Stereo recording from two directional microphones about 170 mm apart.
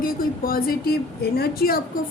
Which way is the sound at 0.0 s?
60° left (ahead or behind).